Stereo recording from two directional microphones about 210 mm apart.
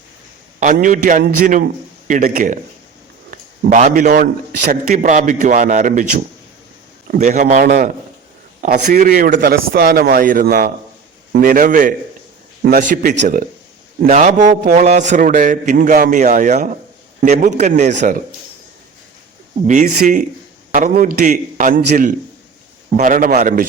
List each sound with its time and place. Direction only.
0.6 s speech: 40° right (ahead or behind)
3.2 s a sound: 35° right (ahead or behind)
3.9 s a man's voice: 45° right (ahead or behind)
19.6 s speech: 35° right (ahead or behind)